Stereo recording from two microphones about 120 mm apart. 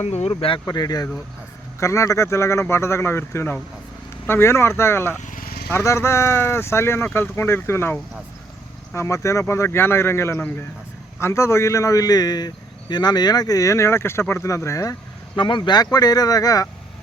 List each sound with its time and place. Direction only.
0.0 s speech: 65° left (ahead or behind)
0.3 s speech: 45° left (ahead or behind)
0.6 s a man's voice: 35° left (ahead or behind)
15.4 s speech: 40° left (ahead or behind)